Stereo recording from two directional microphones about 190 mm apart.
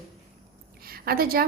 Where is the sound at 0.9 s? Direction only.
50° right (ahead or behind).